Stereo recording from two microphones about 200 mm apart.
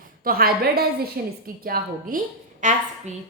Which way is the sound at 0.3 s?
50° right (ahead or behind).